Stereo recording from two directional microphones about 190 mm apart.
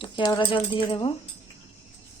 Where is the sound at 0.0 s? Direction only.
25° left (ahead or behind).